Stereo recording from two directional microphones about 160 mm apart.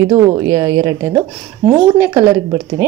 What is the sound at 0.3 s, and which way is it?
A woman's voice, 20° right (ahead or behind).